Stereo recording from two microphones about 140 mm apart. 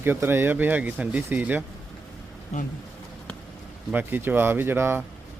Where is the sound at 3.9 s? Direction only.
15° right (ahead or behind).